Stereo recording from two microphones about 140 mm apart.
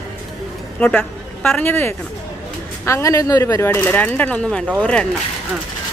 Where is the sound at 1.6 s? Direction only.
15° left (ahead or behind).